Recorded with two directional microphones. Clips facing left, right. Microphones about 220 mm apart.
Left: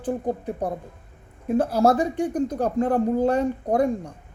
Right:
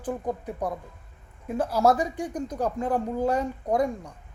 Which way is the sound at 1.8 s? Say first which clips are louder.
Left 3 dB; 30° left (ahead or behind).